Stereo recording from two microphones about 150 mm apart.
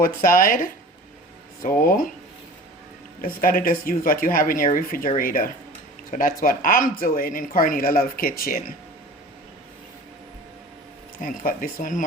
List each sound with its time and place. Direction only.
0.0 s speech: 70° left (ahead or behind)
3.2 s speech: 70° left (ahead or behind)
11.2 s speech: 65° left (ahead or behind)